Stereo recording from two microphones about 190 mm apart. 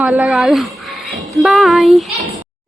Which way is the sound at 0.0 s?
Centre (ahead or behind).